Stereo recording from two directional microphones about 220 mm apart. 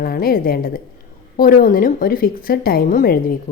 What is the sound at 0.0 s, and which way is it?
A woman's voice, 40° left (ahead or behind).